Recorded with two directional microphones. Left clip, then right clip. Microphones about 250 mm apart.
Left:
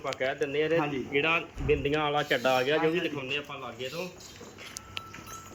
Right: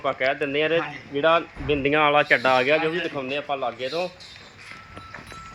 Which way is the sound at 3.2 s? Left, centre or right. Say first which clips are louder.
Right 8 dB; centre.